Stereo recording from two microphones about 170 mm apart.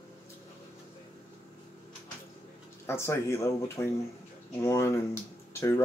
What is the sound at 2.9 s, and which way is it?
Speech, 15° left (ahead or behind).